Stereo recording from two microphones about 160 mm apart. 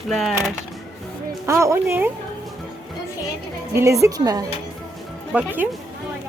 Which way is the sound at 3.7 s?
15° right (ahead or behind).